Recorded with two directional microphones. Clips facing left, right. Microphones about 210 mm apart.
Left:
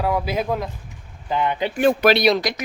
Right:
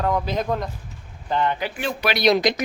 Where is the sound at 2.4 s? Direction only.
20° right (ahead or behind).